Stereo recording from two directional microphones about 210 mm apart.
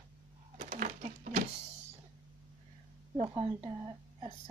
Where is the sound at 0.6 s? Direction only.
35° right (ahead or behind).